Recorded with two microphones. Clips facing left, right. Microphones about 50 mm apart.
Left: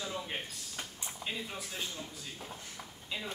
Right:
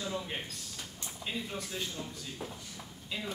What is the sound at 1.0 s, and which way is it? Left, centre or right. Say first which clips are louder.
Speech: right 2 dB; centre.